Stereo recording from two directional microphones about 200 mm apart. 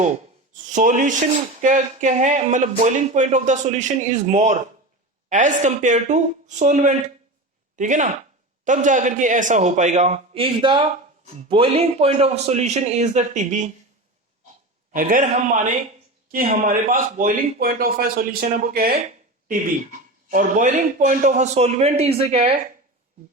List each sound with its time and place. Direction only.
0.5 s speech: 40° right (ahead or behind)
14.9 s a man's voice: 45° right (ahead or behind)